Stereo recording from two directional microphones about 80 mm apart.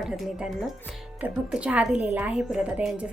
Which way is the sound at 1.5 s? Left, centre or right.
Centre.